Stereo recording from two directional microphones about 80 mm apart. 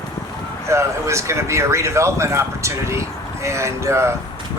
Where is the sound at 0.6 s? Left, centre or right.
Right.